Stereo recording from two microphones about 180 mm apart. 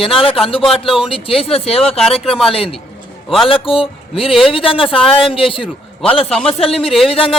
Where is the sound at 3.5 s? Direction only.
30° left (ahead or behind).